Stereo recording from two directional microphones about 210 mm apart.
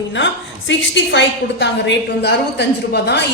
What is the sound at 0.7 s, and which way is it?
A woman's voice, 60° left (ahead or behind).